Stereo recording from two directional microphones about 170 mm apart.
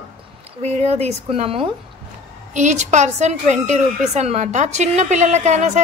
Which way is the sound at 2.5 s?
45° right (ahead or behind).